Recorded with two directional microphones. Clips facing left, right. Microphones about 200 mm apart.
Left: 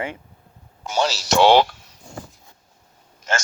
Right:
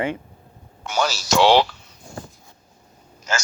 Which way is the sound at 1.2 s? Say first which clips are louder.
Left 1 dB; 55° left (ahead or behind).